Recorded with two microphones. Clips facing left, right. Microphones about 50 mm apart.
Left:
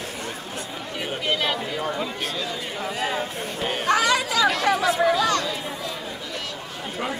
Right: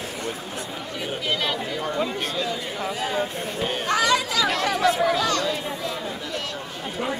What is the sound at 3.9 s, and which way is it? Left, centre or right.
Chatter, left.